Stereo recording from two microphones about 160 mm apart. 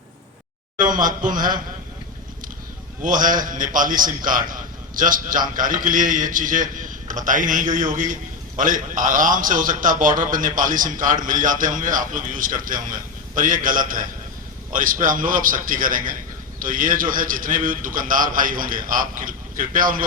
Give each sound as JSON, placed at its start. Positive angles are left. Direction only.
{"t": 0.8, "sound": "a man's voice", "side_deg": -55}
{"t": 3.0, "sound": "a man's voice", "side_deg": -55}